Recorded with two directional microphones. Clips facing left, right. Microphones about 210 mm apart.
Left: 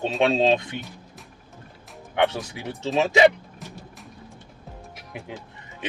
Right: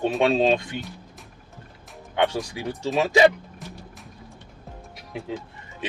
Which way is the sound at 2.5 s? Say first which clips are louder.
Even; 20° left (ahead or behind).